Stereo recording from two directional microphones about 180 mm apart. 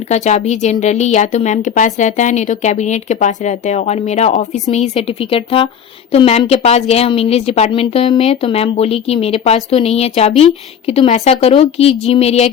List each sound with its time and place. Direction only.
0.1 s a woman's voice: 40° left (ahead or behind)